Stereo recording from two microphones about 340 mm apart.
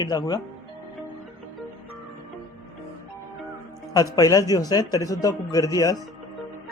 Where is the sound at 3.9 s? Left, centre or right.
Centre.